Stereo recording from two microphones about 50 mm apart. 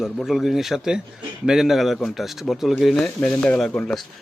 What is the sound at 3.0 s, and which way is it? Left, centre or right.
Speech, left.